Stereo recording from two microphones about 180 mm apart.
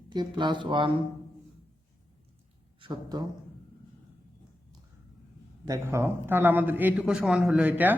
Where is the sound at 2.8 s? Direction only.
25° right (ahead or behind).